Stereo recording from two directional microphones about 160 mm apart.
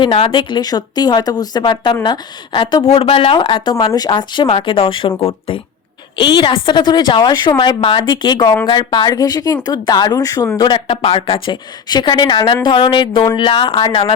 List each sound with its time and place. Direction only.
0.0 s a woman's voice: 35° left (ahead or behind)
6.1 s a woman's voice: 30° left (ahead or behind)